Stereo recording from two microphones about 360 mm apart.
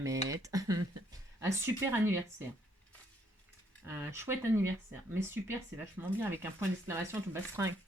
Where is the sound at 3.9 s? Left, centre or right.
Centre.